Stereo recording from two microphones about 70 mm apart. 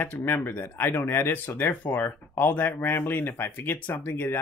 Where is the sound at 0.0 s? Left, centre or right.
Left.